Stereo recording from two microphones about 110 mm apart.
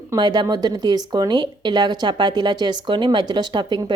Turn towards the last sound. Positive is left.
turn(degrees=-45)  # may be behind; listen again after turning